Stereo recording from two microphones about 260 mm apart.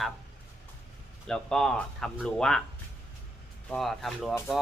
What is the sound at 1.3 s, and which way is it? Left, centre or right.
Speech, centre.